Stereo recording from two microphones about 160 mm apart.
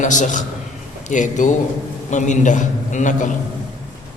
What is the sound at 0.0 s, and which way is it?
A man's voice, 50° left (ahead or behind).